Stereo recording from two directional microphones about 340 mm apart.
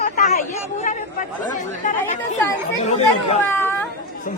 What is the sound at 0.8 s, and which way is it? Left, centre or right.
Speech, left.